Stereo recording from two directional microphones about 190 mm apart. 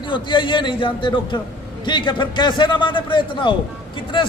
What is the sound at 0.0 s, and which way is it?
A man's voice, 25° left (ahead or behind).